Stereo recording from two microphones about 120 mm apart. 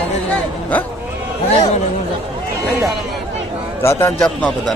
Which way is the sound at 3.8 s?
20° left (ahead or behind).